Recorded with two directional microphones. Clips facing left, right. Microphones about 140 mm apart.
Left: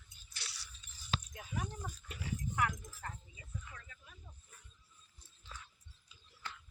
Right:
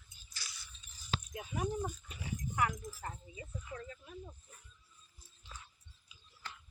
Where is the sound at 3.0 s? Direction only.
30° right (ahead or behind).